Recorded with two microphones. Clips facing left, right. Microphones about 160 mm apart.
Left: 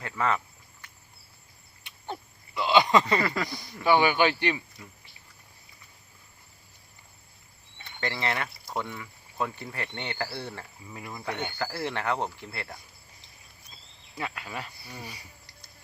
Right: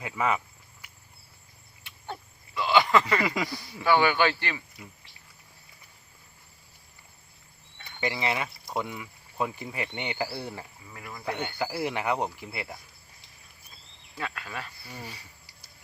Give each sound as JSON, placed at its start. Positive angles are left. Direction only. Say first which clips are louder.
{"t": 0.0, "sound": "cricket", "louder": "even", "side_deg": -10}
{"t": 2.6, "sound": "a sound", "louder": "left 1 dB", "side_deg": 15}
{"t": 3.2, "sound": "speech", "louder": "even", "side_deg": -10}
{"t": 3.8, "sound": "speech", "louder": "left 1 dB", "side_deg": 15}
{"t": 8.0, "sound": "speech", "louder": "right 1 dB", "side_deg": -10}
{"t": 10.9, "sound": "speech", "louder": "left 2 dB", "side_deg": 20}
{"t": 11.2, "sound": "speech", "louder": "right 2 dB", "side_deg": -10}
{"t": 14.2, "sound": "speech", "louder": "left 1 dB", "side_deg": 15}